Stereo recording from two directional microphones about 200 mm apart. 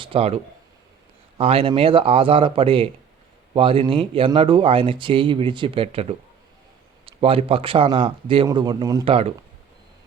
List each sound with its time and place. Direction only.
0.0 s speech: 30° right (ahead or behind)
1.4 s speech: 30° right (ahead or behind)